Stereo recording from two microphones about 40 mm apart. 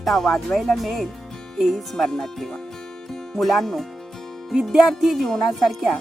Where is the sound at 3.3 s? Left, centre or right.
Centre.